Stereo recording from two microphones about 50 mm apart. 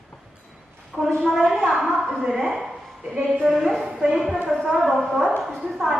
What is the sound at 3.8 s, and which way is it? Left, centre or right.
A woman's voice, centre.